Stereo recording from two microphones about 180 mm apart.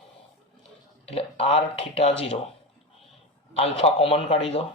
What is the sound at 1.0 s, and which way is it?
Speech, 35° left (ahead or behind).